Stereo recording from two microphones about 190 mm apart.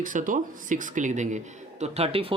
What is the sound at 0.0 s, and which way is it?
Speech, 45° right (ahead or behind).